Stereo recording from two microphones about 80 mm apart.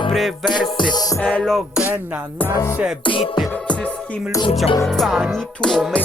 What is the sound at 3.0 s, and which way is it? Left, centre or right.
Music, left.